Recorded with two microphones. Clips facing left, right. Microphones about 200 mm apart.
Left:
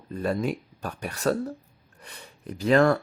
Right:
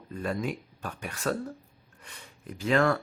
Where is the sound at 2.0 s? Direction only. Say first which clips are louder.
Left 4 dB; 35° left (ahead or behind).